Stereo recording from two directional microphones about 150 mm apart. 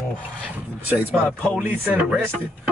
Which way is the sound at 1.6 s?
10° right (ahead or behind).